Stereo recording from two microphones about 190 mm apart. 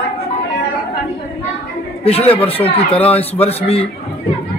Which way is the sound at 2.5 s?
30° left (ahead or behind).